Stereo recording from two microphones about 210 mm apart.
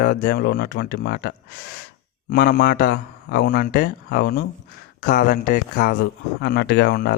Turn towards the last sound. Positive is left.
turn(degrees=50)  # may be behind; listen again after turning